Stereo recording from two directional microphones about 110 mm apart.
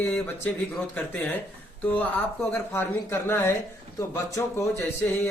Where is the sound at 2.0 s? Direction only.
15° left (ahead or behind).